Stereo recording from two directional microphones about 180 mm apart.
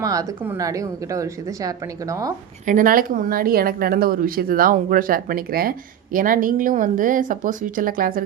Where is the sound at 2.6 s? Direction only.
45° right (ahead or behind).